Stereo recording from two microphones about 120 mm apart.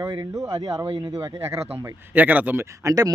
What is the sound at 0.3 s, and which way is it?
Speech, 30° right (ahead or behind).